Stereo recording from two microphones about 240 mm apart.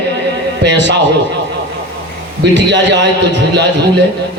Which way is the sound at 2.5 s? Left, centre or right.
Right.